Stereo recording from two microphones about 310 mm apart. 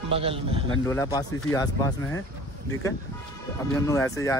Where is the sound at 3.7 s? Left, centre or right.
Centre.